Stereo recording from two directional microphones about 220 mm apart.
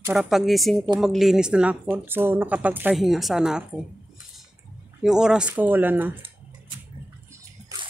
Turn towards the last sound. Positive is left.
turn(degrees=-15)  # may be behind; listen again after turning